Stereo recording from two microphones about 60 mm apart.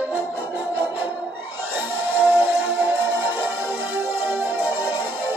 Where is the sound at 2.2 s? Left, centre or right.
Right.